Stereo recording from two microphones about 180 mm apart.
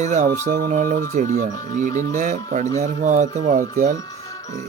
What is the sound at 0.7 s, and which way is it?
Speech, 45° right (ahead or behind).